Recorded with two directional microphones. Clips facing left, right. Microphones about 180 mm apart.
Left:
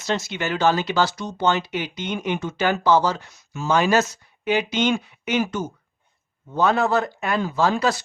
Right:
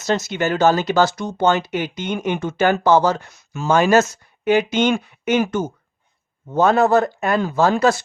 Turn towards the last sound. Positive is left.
turn(degrees=-50)  # may be behind; listen again after turning